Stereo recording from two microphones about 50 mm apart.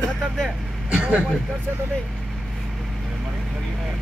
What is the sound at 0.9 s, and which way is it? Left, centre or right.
Speech, centre.